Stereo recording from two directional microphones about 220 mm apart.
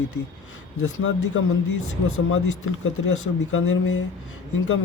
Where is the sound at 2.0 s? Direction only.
65° left (ahead or behind).